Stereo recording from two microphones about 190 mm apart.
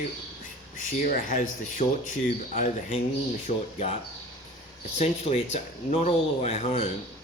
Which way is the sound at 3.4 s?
35° left (ahead or behind).